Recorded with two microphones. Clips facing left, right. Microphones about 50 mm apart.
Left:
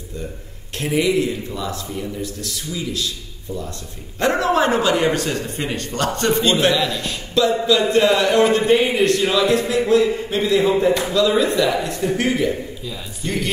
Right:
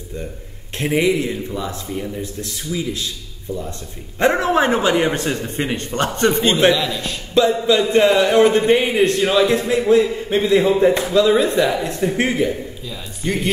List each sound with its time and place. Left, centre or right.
0.7 s a man's voice: right
4.2 s a man's voice: right
6.7 s a man's voice: centre
7.3 s a man's voice: right
12.8 s a man's voice: centre